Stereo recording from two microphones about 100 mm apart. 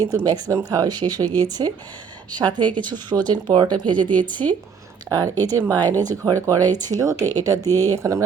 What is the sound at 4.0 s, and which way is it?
Speech, 15° left (ahead or behind).